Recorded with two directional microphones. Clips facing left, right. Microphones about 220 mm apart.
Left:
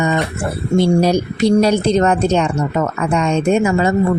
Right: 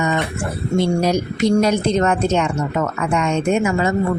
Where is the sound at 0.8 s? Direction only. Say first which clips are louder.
Left 4 dB; 30° left (ahead or behind).